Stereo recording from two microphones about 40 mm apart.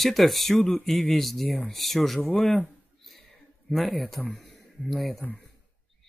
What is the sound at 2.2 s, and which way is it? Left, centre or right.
Speech, centre.